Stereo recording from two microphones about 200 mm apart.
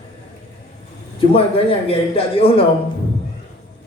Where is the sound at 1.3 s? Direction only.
30° left (ahead or behind).